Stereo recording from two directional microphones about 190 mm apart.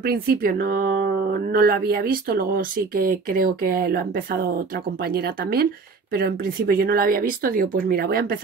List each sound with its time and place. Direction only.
0.0 s speech: 55° right (ahead or behind)